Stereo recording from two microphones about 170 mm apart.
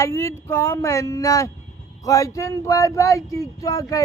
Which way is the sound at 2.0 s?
20° left (ahead or behind).